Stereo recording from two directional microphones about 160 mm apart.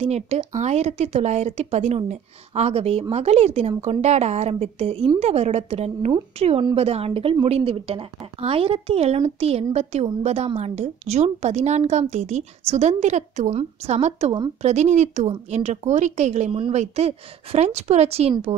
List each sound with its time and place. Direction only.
0.0 s a woman's voice: 40° right (ahead or behind)